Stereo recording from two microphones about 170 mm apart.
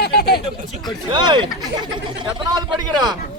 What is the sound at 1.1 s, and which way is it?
Speech, 30° right (ahead or behind).